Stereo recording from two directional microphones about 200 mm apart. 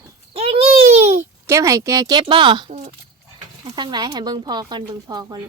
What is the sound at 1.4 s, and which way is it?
Speech, 15° right (ahead or behind).